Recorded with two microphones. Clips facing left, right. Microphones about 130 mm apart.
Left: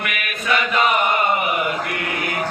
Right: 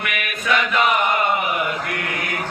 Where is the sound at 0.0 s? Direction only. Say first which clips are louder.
Even; centre (ahead or behind).